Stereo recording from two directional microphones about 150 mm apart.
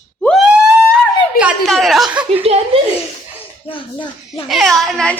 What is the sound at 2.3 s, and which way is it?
Speech, 40° right (ahead or behind).